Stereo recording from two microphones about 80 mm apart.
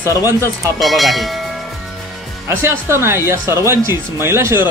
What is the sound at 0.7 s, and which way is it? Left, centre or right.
Speech, centre.